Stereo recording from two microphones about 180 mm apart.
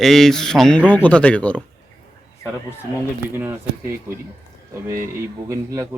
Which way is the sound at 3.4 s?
10° right (ahead or behind).